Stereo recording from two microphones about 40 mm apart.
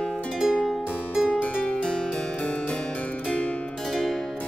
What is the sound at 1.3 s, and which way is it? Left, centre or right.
Music, left.